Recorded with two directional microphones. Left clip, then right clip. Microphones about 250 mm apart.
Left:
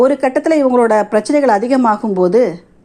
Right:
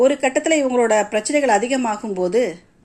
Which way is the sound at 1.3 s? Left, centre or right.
Centre.